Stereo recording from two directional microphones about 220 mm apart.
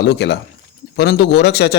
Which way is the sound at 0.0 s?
50° left (ahead or behind).